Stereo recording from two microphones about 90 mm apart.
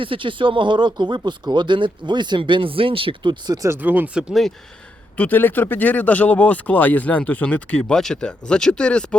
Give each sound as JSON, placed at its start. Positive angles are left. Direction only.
{"t": 0.0, "sound": "speech", "side_deg": -70}
{"t": 3.4, "sound": "speech", "side_deg": -45}
{"t": 3.7, "sound": "speech", "side_deg": -20}
{"t": 5.1, "sound": "speech", "side_deg": 20}